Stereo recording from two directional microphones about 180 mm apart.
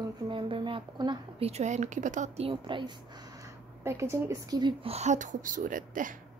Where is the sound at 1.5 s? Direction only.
40° right (ahead or behind).